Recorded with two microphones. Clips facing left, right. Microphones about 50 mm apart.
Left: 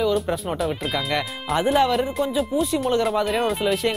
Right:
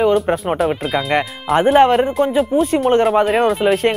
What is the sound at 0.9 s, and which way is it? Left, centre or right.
Speech, right.